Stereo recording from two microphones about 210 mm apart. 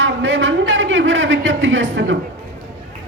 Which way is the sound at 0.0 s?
60° right (ahead or behind).